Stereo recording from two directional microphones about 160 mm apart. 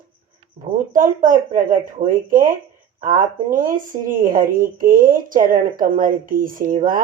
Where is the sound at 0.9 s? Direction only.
55° right (ahead or behind).